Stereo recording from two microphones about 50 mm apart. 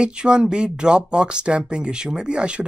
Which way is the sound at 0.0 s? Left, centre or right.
Centre.